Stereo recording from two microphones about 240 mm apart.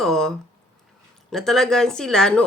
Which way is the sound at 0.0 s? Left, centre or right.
Centre.